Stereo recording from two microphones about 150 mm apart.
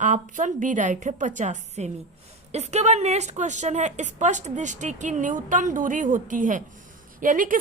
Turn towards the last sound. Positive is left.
turn(degrees=-65)  # may be behind; listen again after turning